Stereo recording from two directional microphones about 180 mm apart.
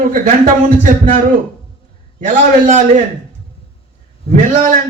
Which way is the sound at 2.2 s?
45° right (ahead or behind).